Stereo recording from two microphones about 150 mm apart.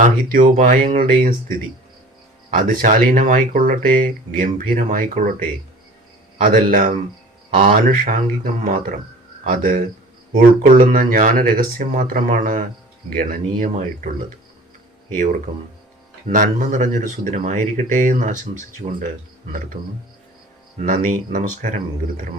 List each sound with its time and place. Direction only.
0.0 s speech: 65° right (ahead or behind)
15.1 s speech: 65° right (ahead or behind)
20.8 s speech: 65° right (ahead or behind)